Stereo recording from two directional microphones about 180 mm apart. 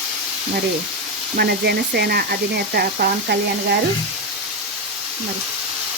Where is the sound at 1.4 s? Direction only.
60° right (ahead or behind).